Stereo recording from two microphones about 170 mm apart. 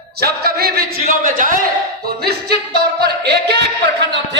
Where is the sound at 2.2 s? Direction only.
70° right (ahead or behind).